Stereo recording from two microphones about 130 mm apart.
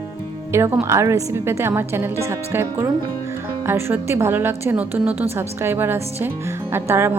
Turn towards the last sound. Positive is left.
turn(degrees=-20)  # may be behind; listen again after turning